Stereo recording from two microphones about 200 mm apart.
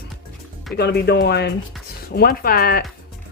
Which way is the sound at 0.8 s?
55° left (ahead or behind).